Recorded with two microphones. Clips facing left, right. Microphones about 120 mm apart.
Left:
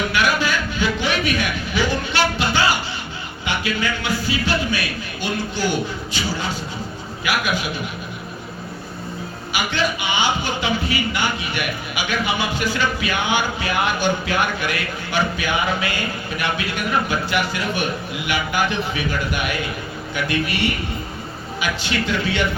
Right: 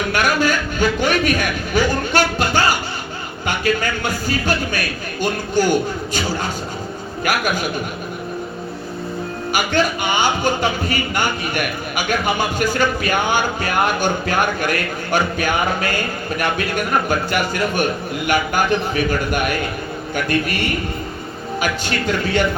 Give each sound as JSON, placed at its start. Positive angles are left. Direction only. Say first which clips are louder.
{"t": 0.1, "sound": "a sound", "louder": "right 2 dB", "side_deg": -45}
{"t": 3.4, "sound": "a man's voice", "louder": "right 4 dB", "side_deg": -45}
{"t": 7.3, "sound": "a man's voice", "louder": "right 2 dB", "side_deg": -45}
{"t": 9.5, "sound": "a man's voice", "louder": "right 4 dB", "side_deg": -45}